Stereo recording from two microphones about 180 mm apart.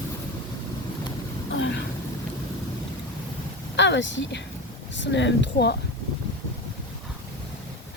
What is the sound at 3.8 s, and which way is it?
Speech, 90° left.